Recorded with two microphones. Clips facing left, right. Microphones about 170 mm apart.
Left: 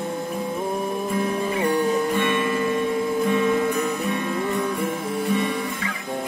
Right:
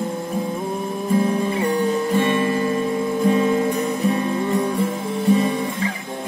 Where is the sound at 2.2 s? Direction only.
35° right (ahead or behind).